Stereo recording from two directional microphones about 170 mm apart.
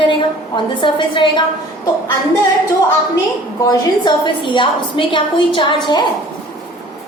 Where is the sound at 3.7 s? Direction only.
25° left (ahead or behind).